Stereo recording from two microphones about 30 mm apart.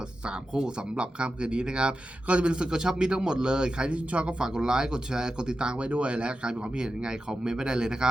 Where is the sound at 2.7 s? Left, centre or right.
Right.